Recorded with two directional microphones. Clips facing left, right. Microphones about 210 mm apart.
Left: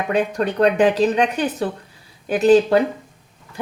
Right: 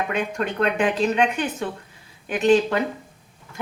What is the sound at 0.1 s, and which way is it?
A woman's voice, 35° left (ahead or behind).